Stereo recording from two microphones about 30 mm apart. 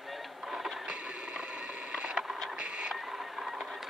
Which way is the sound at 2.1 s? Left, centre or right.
Centre.